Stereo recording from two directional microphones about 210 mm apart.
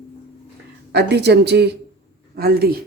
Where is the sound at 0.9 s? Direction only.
50° right (ahead or behind).